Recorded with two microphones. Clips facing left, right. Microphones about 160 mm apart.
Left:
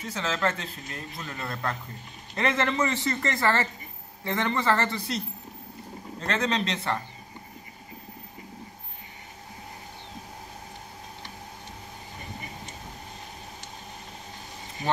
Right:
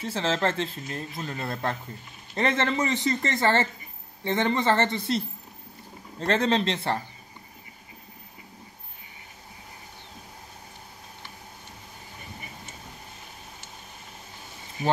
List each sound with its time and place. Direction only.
0.0 s speech: 30° right (ahead or behind)
6.2 s speech: 30° right (ahead or behind)